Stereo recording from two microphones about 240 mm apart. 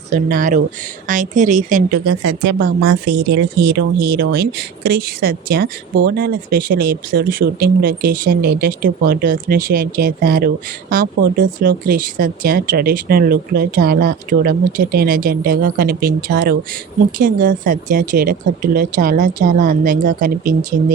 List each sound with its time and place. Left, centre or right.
0.1 s speech: right